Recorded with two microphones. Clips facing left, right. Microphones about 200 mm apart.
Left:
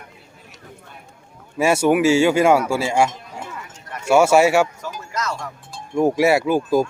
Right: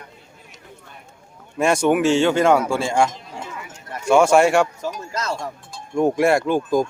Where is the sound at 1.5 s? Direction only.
5° left (ahead or behind).